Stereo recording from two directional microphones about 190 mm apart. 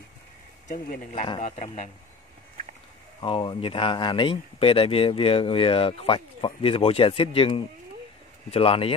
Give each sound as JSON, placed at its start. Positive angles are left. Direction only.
{"t": 1.4, "sound": "speech", "side_deg": 40}
{"t": 3.2, "sound": "speech", "side_deg": 25}